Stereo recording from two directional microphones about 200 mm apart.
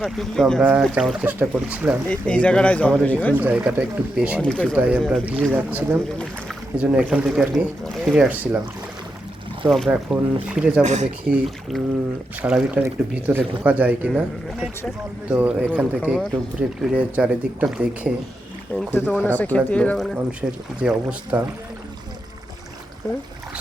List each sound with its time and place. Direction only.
0.0 s speech: centre (ahead or behind)
2.0 s speech: 5° left (ahead or behind)
3.3 s speech: 10° right (ahead or behind)
4.8 s speech: 5° right (ahead or behind)
9.6 s speech: centre (ahead or behind)
10.8 s speech: 35° right (ahead or behind)
11.3 s speech: centre (ahead or behind)
18.9 s speech: 10° left (ahead or behind)
20.4 s speech: 10° right (ahead or behind)